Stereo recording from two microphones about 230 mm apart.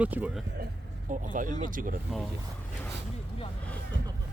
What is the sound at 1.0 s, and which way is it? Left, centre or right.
Speech, right.